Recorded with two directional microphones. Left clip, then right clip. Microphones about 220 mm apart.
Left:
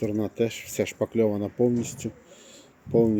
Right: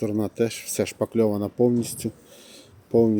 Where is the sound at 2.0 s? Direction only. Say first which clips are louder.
Right 3 dB; 20° right (ahead or behind).